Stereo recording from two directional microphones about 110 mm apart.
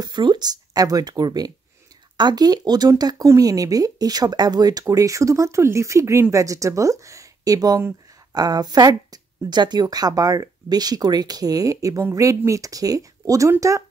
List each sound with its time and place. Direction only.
0.0 s speech: 40° right (ahead or behind)